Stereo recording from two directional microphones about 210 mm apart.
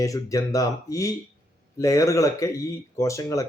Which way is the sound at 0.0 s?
15° left (ahead or behind).